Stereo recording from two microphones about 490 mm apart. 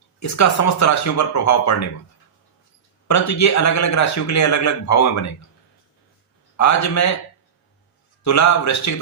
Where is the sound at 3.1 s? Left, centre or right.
Left.